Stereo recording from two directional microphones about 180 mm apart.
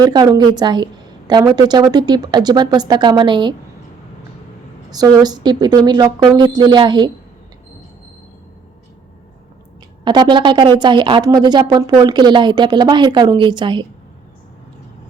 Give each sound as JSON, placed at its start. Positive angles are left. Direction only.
{"t": 0.0, "sound": "speech", "side_deg": -20}
{"t": 4.9, "sound": "speech", "side_deg": -20}
{"t": 10.0, "sound": "speech", "side_deg": -25}